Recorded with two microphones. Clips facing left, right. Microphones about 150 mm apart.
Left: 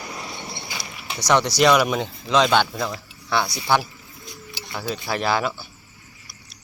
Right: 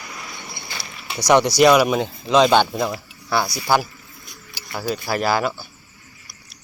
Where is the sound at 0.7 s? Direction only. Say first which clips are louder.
Left 1 dB; 15° left (ahead or behind).